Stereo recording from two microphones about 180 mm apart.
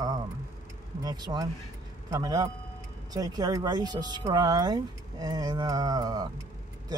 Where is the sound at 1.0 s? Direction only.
25° right (ahead or behind).